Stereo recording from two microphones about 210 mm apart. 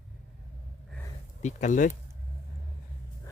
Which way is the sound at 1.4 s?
35° left (ahead or behind).